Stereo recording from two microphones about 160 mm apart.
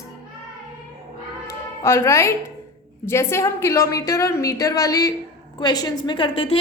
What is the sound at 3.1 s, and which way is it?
A woman's voice, 15° left (ahead or behind).